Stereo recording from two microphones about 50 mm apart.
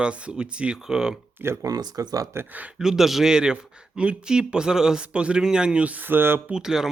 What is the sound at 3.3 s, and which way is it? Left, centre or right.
Speech, centre.